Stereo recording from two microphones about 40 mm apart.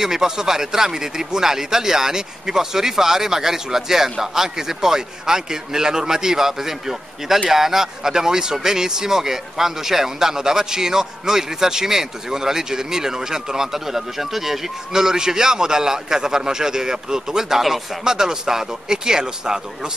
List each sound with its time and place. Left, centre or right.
0.0 s a man's voice: centre
18.0 s a man's voice: centre